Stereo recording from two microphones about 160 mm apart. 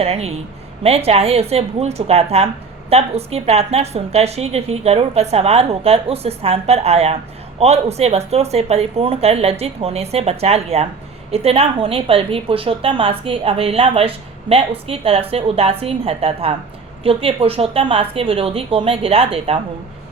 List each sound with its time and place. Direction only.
0.0 s a woman's voice: 40° right (ahead or behind)